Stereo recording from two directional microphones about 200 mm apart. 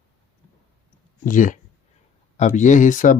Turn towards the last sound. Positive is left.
turn(degrees=40)  # may be behind; listen again after turning